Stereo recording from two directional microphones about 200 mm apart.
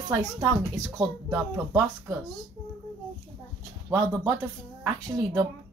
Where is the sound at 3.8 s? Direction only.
15° right (ahead or behind).